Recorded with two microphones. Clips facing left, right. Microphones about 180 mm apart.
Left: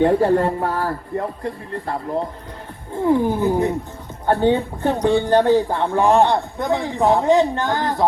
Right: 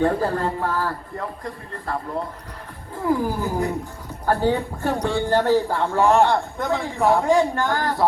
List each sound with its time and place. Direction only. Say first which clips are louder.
0.0 s a man's voice: left 6 dB; 30° left (ahead or behind)